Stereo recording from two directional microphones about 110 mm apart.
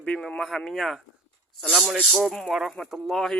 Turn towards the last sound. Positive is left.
turn(degrees=0)  # may be behind; listen again after turning